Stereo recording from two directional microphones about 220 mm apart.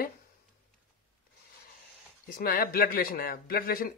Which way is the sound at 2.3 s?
40° left (ahead or behind).